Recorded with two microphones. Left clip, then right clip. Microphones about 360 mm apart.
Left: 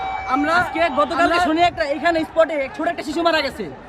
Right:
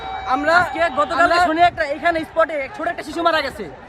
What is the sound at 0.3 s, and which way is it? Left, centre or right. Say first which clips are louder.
Speech: right 3 dB; right.